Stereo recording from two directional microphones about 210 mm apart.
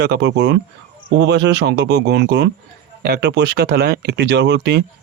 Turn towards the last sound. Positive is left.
turn(degrees=-50)  # may be behind; listen again after turning